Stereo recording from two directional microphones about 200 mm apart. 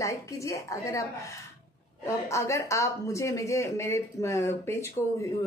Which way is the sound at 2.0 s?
15° left (ahead or behind).